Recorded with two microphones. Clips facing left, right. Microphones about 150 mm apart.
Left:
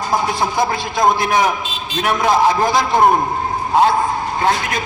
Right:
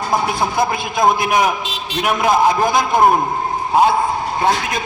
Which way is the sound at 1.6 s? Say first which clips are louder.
Right 1 dB; 80° right.